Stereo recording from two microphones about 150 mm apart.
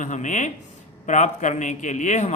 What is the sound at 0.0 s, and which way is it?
A man's voice, 55° left (ahead or behind).